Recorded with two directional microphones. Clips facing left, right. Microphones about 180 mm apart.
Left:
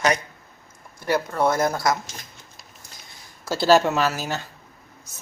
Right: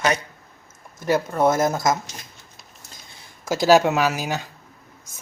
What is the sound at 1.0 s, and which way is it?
Speech, 20° right (ahead or behind).